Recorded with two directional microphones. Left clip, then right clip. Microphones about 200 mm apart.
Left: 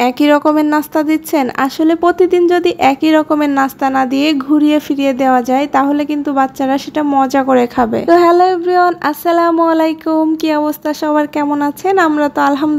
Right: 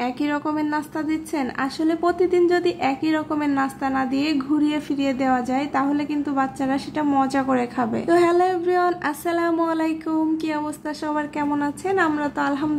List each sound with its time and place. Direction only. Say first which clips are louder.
0.0 s a woman's voice: left 14 dB; 55° left (ahead or behind)